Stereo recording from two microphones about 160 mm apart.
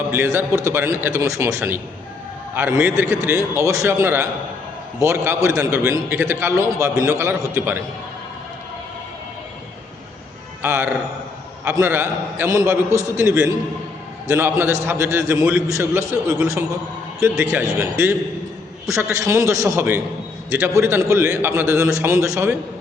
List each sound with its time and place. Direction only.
0.1 s a man's voice: 15° right (ahead or behind)
10.6 s a man's voice: 15° right (ahead or behind)